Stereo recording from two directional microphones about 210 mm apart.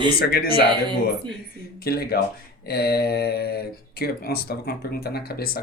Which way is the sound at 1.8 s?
45° left (ahead or behind).